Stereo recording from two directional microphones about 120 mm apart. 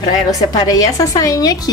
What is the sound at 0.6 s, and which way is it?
A woman's voice, 30° left (ahead or behind).